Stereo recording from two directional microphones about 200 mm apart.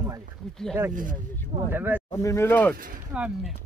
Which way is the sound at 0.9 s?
40° right (ahead or behind).